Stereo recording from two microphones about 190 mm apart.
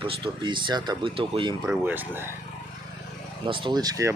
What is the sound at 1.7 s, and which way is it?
Speech, 10° right (ahead or behind).